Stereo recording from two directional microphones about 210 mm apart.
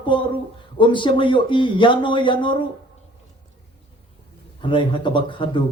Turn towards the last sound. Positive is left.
turn(degrees=25)  # may be behind; listen again after turning